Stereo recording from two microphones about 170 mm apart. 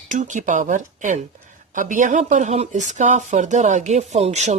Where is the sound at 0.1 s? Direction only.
45° right (ahead or behind).